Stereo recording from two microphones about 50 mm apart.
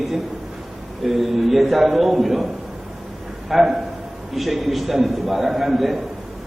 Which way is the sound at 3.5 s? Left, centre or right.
Centre.